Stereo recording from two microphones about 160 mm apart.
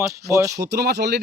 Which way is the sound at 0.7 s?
90° right.